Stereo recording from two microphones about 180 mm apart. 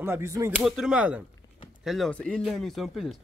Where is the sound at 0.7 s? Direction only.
5° right (ahead or behind).